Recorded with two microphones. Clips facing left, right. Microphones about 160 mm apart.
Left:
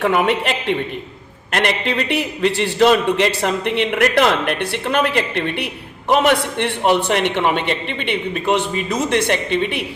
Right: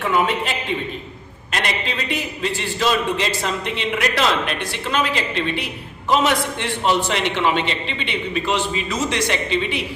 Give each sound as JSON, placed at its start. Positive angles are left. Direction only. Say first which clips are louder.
{"t": 0.0, "sound": "a man's voice", "louder": "left 3 dB", "side_deg": 65}